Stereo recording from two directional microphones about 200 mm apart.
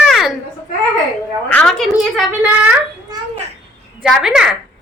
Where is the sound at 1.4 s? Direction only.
5° left (ahead or behind).